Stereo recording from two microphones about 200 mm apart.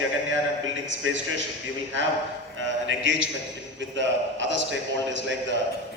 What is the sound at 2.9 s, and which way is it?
A man's voice, 70° right (ahead or behind).